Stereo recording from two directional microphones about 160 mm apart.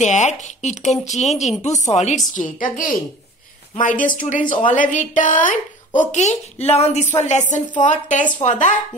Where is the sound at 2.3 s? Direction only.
55° left (ahead or behind).